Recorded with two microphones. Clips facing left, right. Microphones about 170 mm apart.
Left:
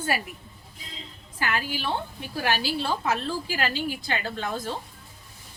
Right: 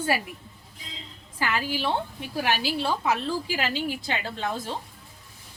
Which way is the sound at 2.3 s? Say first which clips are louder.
Even; 20° right (ahead or behind).